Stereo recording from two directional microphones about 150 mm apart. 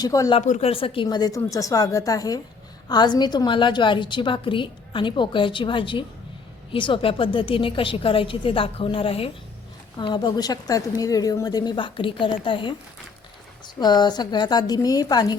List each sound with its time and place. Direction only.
0.0 s a woman's voice: 25° left (ahead or behind)
0.3 s speech: 50° left (ahead or behind)
0.7 s a woman's voice: 40° left (ahead or behind)
1.0 s a woman's voice: 25° left (ahead or behind)
13.7 s a woman's voice: 30° left (ahead or behind)